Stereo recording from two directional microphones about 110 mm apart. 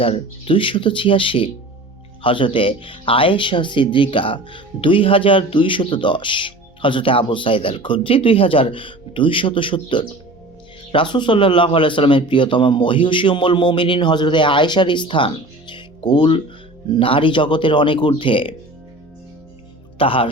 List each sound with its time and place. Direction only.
0.0 s speech: 55° left (ahead or behind)
20.0 s speech: 55° left (ahead or behind)